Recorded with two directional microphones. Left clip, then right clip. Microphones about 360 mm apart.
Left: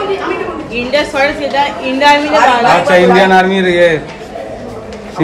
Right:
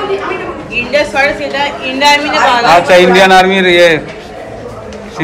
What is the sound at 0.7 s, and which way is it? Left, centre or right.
A woman's voice, left.